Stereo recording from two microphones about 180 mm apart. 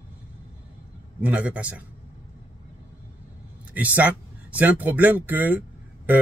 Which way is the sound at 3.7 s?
10° right (ahead or behind).